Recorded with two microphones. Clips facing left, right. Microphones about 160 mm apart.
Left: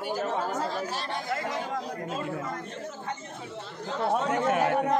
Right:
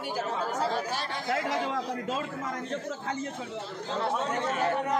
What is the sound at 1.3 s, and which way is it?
Speech, 75° right (ahead or behind).